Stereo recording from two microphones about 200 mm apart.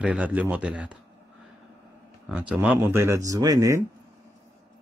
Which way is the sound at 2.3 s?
5° right (ahead or behind).